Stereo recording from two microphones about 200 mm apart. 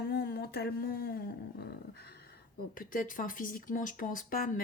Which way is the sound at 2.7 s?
45° left (ahead or behind).